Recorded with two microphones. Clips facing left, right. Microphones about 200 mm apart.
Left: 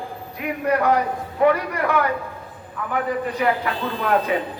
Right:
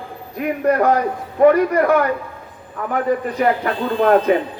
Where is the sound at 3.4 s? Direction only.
45° right (ahead or behind).